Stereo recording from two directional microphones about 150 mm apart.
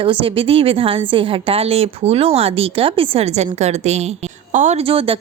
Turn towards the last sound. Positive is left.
turn(degrees=-40)  # may be behind; listen again after turning